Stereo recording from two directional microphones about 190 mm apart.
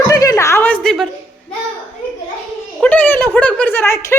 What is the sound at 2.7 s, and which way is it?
A woman's voice, 10° left (ahead or behind).